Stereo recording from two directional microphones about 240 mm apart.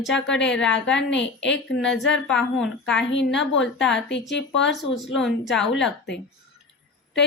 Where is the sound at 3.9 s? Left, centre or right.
Left.